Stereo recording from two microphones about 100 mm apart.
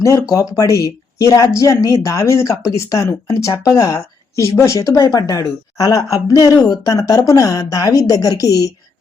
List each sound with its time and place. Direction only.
0.0 s speech: 30° left (ahead or behind)